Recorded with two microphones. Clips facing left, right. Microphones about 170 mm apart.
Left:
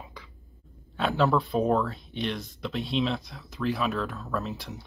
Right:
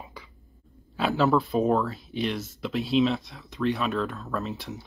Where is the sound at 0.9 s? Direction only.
Centre (ahead or behind).